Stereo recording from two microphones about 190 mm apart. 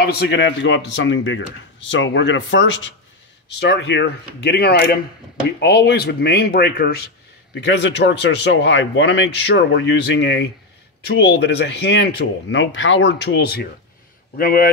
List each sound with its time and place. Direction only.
0.0 s speech: 60° left (ahead or behind); by 2.9 s 80° left
3.5 s speech: 65° left (ahead or behind)
7.5 s a man's voice: 65° left (ahead or behind); by 14.7 s 50° left (ahead or behind)